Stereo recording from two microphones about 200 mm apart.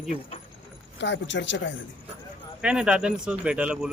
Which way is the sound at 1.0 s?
65° left (ahead or behind).